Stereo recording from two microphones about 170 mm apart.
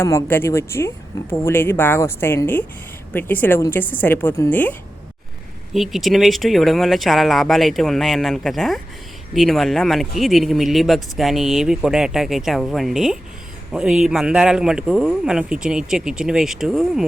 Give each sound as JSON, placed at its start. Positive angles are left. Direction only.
{"t": 0.0, "sound": "a woman's voice", "side_deg": 15}
{"t": 5.7, "sound": "speech", "side_deg": 0}